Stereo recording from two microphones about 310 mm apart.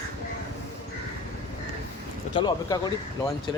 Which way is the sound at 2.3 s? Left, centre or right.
Centre.